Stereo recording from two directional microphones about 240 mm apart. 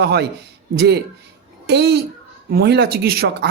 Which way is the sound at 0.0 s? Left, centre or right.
Right.